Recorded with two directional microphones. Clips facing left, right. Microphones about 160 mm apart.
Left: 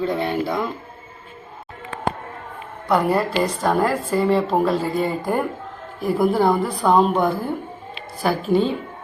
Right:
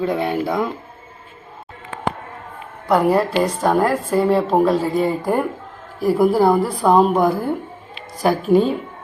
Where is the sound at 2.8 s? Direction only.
10° right (ahead or behind).